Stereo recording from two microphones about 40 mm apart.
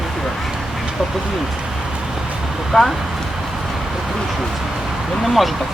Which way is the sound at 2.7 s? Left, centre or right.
Centre.